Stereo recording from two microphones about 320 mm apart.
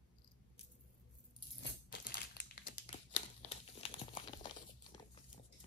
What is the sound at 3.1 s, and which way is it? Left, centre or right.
Crumpling, centre.